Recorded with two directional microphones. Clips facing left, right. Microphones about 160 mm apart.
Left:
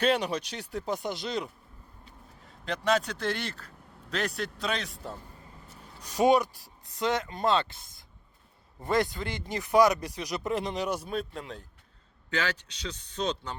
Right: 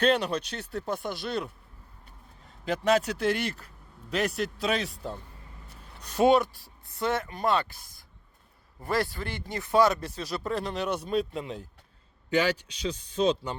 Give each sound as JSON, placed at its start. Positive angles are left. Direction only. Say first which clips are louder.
{"t": 0.0, "sound": "speech", "louder": "right 2 dB", "side_deg": 10}
{"t": 2.6, "sound": "a man's voice", "louder": "right 3 dB", "side_deg": -5}
{"t": 6.0, "sound": "speech", "louder": "right 1 dB", "side_deg": 10}